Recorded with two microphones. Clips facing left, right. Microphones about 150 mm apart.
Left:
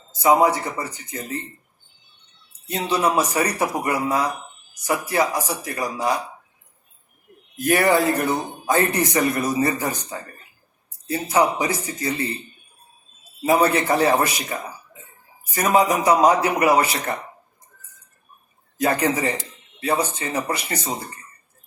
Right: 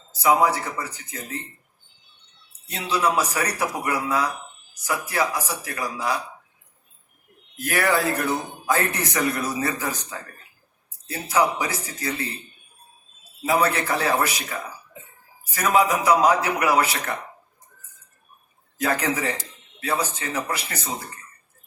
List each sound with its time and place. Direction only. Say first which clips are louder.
0.2 s speech: left 3 dB; 30° left (ahead or behind)
2.6 s speech: left 2 dB; 30° left (ahead or behind)
7.6 s speech: left 5 dB; 30° left (ahead or behind)
11.1 s speech: left 3 dB; 30° left (ahead or behind)
13.4 s speech: left 4 dB; 30° left (ahead or behind)
18.8 s speech: left 3 dB; 30° left (ahead or behind)